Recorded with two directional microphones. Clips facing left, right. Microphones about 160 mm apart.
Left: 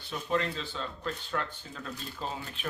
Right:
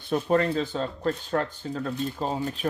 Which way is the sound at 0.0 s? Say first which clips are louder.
Right 8 dB; 50° right (ahead or behind).